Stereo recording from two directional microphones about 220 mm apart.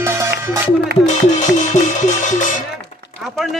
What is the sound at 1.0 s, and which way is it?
Music, 35° left (ahead or behind).